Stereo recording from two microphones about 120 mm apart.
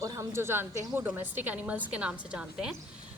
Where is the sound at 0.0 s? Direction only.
25° right (ahead or behind).